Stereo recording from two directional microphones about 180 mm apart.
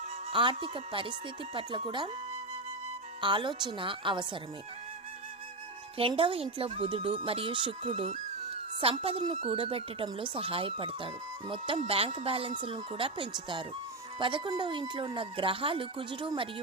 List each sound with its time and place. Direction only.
0.3 s a woman's voice: 30° right (ahead or behind)
3.2 s a woman's voice: 25° right (ahead or behind)
6.0 s a woman's voice: 30° right (ahead or behind)